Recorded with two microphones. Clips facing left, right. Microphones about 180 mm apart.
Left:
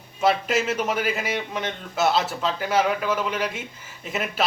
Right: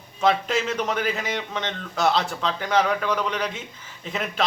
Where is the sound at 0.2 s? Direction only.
5° left (ahead or behind).